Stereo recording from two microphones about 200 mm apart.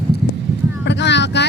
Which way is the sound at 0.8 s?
60° left (ahead or behind).